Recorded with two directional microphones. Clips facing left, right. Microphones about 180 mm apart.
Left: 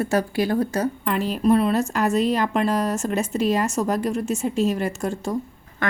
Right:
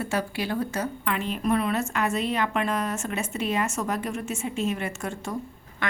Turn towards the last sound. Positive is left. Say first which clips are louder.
# left 5 dB
turn(degrees=45)  # may be behind; listen again after turning